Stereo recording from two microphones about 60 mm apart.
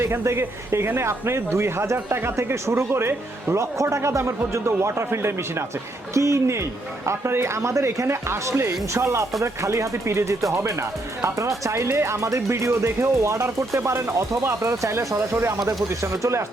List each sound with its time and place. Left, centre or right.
0.0 s speech: right